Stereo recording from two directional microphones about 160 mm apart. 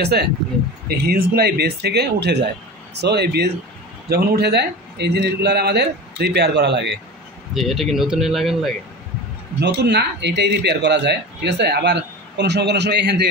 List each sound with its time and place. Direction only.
0.0 s speech: 90° right
0.8 s speech: 75° right (ahead or behind); by 3.4 s 90° right
4.1 s speech: 80° right
7.5 s speech: centre (ahead or behind)
9.6 s speech: 90° right